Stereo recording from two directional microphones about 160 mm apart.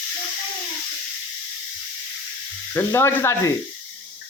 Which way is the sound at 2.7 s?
15° left (ahead or behind).